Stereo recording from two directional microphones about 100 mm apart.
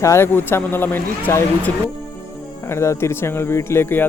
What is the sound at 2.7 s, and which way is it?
Speech, 25° left (ahead or behind).